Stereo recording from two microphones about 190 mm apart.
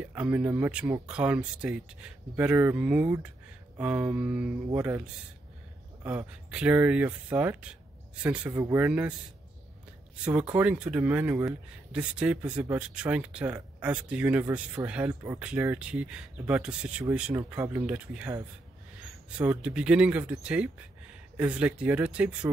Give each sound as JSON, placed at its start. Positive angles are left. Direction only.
{"t": 0.1, "sound": "speech", "side_deg": -10}
{"t": 6.1, "sound": "speech", "side_deg": -5}
{"t": 8.7, "sound": "speech", "side_deg": -10}
{"t": 10.5, "sound": "speech", "side_deg": -5}